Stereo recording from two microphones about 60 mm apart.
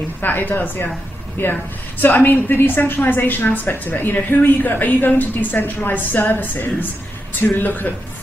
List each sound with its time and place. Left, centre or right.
0.2 s a woman's voice: left